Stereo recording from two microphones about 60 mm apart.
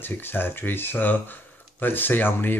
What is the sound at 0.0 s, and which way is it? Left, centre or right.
Speech, left.